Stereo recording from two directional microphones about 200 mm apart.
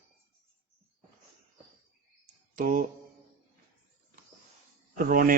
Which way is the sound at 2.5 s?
45° right (ahead or behind).